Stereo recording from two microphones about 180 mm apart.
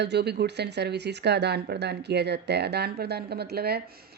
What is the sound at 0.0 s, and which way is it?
A woman's voice, 70° right (ahead or behind).